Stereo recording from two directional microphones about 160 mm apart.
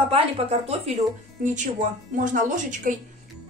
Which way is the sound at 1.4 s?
50° right (ahead or behind).